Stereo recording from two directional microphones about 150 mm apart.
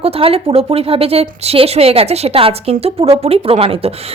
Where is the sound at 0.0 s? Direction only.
40° right (ahead or behind).